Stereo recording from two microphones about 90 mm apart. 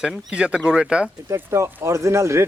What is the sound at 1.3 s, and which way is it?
Speech, 30° right (ahead or behind).